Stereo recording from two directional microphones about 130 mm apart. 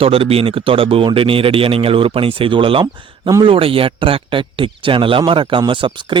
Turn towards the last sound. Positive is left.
turn(degrees=-40)  # may be behind; listen again after turning